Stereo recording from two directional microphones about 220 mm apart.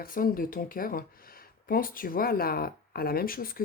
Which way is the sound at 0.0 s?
40° left (ahead or behind).